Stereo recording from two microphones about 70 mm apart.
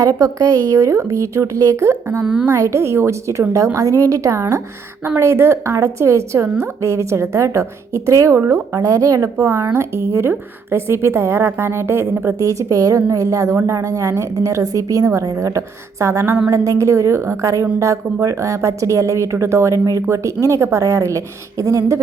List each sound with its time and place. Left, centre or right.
0.0 s a woman's voice: right
2.2 s a woman's voice: centre
2.5 s a woman's voice: right
8.4 s a woman's voice: right
8.7 s a woman's voice: right
9.7 s a woman's voice: right
12.4 s a woman's voice: right